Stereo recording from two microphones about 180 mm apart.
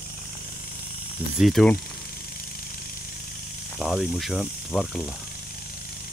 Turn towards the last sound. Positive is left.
turn(degrees=0)  # may be behind; listen again after turning